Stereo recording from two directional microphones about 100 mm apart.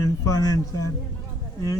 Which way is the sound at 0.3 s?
35° left (ahead or behind).